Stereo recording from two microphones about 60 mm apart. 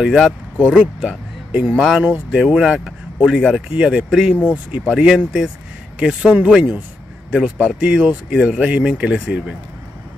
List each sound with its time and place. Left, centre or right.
0.0 s speech: centre; by 2.2 s right
2.3 s speech: centre
4.5 s speech: right
4.9 s speech: centre